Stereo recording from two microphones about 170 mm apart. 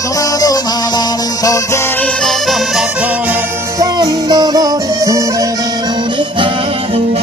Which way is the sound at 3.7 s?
25° right (ahead or behind).